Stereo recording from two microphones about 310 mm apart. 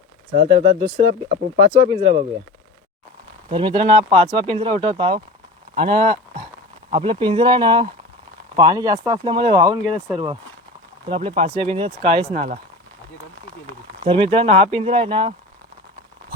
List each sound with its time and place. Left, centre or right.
0.4 s speech: centre
3.5 s speech: centre
14.0 s speech: centre